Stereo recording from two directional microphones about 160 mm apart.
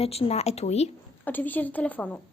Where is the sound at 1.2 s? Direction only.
10° left (ahead or behind).